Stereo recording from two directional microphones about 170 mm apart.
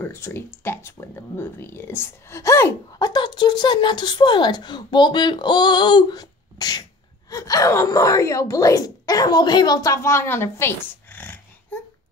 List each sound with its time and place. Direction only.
0.0 s speech: 15° left (ahead or behind)